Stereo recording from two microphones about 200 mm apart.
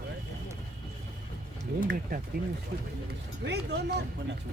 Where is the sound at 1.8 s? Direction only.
55° right (ahead or behind).